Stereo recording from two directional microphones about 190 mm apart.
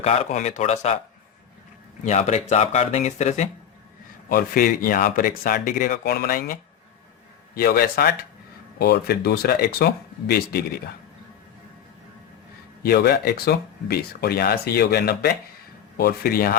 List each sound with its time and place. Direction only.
0.0 s speech: 35° left (ahead or behind)
2.0 s speech: 35° left (ahead or behind)
4.3 s speech: 50° left (ahead or behind)
12.8 s speech: 55° left (ahead or behind)